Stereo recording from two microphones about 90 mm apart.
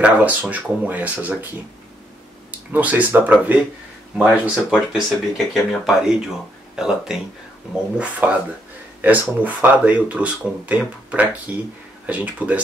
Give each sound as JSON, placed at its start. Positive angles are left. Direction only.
{"t": 0.0, "sound": "speech", "side_deg": -15}
{"t": 2.7, "sound": "speech", "side_deg": -20}
{"t": 4.2, "sound": "speech", "side_deg": -10}